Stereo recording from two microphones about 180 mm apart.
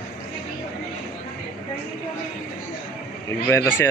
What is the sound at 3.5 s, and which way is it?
Speech, 15° left (ahead or behind).